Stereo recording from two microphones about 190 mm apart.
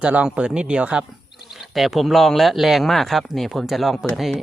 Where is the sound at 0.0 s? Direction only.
5° right (ahead or behind).